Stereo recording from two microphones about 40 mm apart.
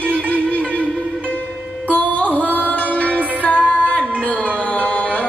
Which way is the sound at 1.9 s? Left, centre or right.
Left.